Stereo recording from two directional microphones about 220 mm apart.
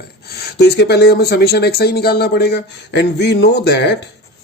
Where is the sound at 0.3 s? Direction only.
45° left (ahead or behind).